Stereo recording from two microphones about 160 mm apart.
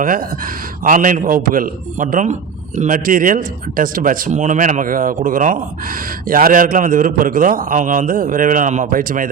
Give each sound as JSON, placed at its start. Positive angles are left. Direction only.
{"t": 0.0, "sound": "a man's voice", "side_deg": -60}